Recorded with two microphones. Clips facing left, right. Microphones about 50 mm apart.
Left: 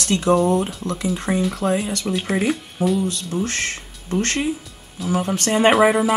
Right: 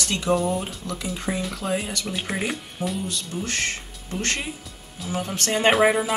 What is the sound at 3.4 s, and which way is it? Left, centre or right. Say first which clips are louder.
Speech: left 2 dB; left.